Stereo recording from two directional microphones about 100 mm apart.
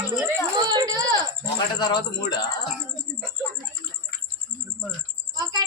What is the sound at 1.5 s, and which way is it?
Speech, 45° left (ahead or behind).